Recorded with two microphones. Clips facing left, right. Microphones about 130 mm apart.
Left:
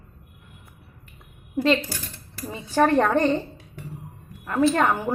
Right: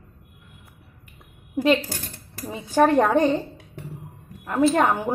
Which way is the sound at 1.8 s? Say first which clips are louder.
Right 1 dB; 45° right (ahead or behind).